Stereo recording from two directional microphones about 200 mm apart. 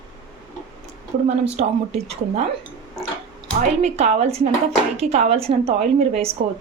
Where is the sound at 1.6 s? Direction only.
35° right (ahead or behind).